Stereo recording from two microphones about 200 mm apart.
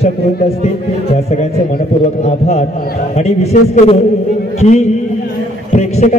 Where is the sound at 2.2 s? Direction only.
35° left (ahead or behind).